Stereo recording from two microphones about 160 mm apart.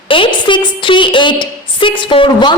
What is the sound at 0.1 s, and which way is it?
A woman's voice, 30° left (ahead or behind).